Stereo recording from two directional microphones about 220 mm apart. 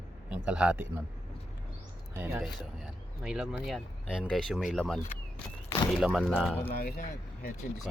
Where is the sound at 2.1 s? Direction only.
10° right (ahead or behind).